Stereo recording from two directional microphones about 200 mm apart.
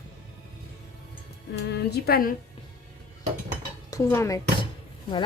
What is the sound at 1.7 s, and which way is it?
Speech, 55° left (ahead or behind).